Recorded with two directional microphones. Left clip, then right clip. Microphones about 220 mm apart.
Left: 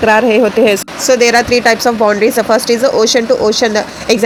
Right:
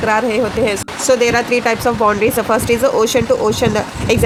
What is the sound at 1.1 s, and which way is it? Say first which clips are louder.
Speech: left 4 dB; 5° left (ahead or behind).